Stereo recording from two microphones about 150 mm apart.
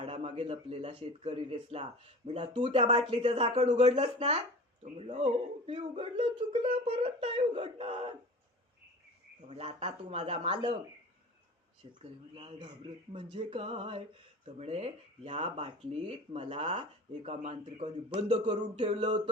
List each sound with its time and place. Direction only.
0.0 s speech: 40° right (ahead or behind)
9.5 s speech: 40° right (ahead or behind)
11.9 s speech: 35° right (ahead or behind)
17.2 s speech: 45° right (ahead or behind)